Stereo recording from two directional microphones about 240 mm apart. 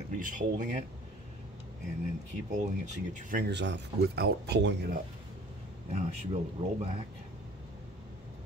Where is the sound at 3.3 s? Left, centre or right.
Right.